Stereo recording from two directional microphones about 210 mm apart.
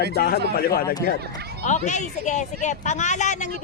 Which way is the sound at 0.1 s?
50° left (ahead or behind).